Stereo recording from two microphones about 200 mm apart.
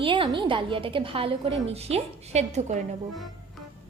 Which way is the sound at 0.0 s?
25° right (ahead or behind).